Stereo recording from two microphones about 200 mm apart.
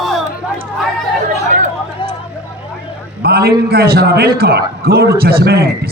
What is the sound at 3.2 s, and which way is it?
A man's voice, 50° right (ahead or behind).